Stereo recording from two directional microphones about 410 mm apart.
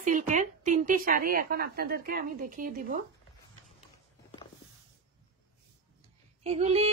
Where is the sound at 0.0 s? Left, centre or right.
Centre.